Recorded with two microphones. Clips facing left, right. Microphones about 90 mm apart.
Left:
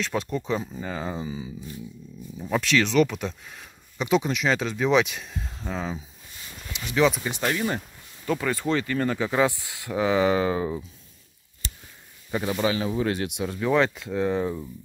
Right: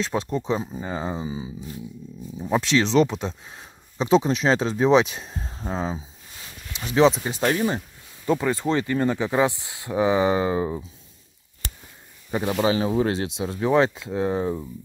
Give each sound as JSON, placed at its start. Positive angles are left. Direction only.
{"t": 0.0, "sound": "speech", "side_deg": -30}
{"t": 12.3, "sound": "speech", "side_deg": -20}